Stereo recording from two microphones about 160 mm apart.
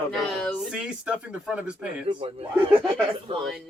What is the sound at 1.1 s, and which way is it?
Speech, 5° right (ahead or behind).